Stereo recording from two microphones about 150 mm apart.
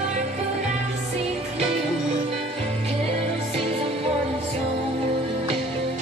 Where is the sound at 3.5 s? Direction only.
40° right (ahead or behind).